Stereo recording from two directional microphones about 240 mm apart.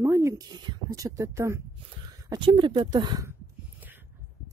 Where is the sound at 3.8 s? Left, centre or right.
Centre.